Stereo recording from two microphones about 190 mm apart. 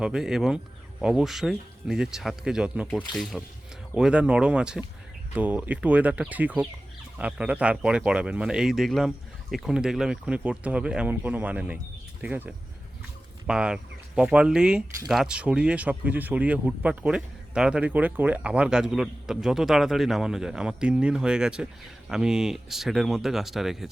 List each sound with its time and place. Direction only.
0.0 s speech: 5° right (ahead or behind)